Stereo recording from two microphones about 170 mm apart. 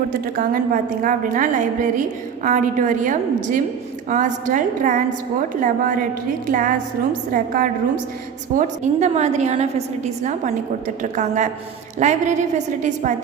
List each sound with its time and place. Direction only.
0.3 s a woman's voice: 55° right (ahead or behind)
6.5 s a woman's voice: 50° right (ahead or behind)